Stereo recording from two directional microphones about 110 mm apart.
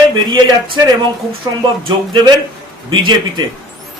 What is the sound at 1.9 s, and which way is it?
Speech, 40° right (ahead or behind).